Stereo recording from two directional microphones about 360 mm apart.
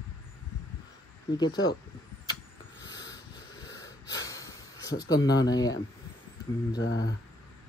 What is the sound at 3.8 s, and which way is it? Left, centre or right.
Snort, left.